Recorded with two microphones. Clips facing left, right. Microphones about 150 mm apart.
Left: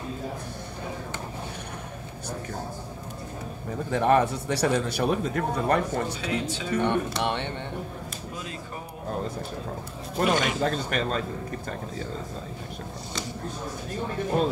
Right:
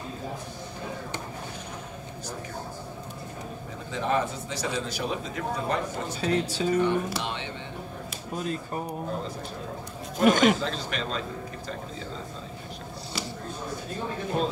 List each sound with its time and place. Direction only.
3.9 s a man's voice: 60° left (ahead or behind)
6.2 s speech: 35° right (ahead or behind)
6.8 s a man's voice: 65° left (ahead or behind)
10.2 s a man's voice: 50° right (ahead or behind)
10.6 s speech: 50° left (ahead or behind)